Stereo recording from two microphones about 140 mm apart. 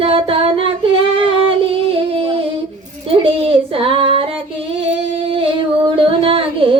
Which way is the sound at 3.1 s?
40° right (ahead or behind).